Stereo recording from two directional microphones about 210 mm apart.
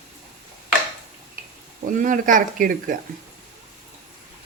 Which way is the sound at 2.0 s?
40° right (ahead or behind).